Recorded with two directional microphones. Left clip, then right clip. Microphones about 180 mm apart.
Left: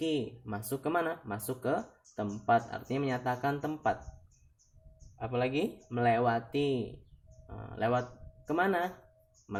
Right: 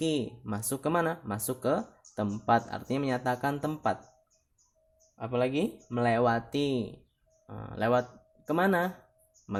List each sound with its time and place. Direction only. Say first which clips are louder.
0.0 s speech: right 2 dB; 60° right (ahead or behind)
5.1 s speech: right 3 dB; 55° right (ahead or behind)